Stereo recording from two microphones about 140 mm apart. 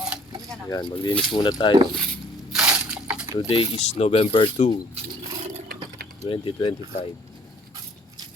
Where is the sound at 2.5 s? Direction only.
5° right (ahead or behind).